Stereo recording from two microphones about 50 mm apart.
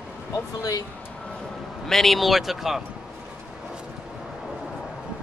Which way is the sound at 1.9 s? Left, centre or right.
Centre.